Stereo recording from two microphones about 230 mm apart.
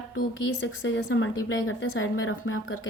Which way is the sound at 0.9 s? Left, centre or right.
Left.